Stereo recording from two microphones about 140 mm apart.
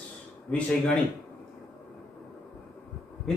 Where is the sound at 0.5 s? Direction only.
10° left (ahead or behind).